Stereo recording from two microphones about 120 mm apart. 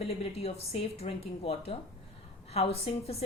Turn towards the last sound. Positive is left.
turn(degrees=60)  # may be behind; listen again after turning